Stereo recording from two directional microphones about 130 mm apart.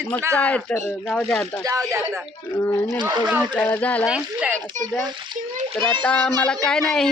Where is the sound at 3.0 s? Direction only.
35° right (ahead or behind).